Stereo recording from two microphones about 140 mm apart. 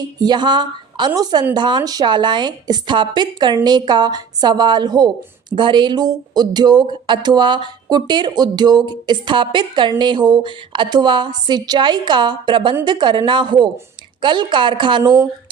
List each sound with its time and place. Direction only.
0.0 s a woman's voice: 30° right (ahead or behind)